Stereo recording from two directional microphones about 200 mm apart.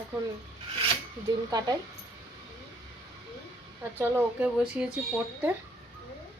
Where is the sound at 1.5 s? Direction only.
20° right (ahead or behind).